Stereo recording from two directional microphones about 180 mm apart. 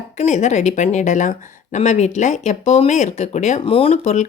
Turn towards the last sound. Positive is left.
turn(degrees=40)  # may be behind; listen again after turning